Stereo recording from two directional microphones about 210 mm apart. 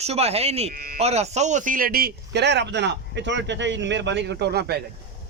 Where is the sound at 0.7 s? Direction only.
45° right (ahead or behind).